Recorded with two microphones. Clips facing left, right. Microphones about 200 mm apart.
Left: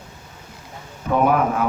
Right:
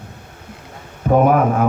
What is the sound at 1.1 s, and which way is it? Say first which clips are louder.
Speech: right 4 dB; 45° right (ahead or behind).